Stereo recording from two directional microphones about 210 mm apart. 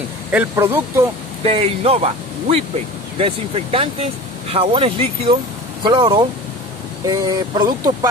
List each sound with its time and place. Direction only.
0.3 s speech: 10° right (ahead or behind)
1.4 s speech: 30° right (ahead or behind)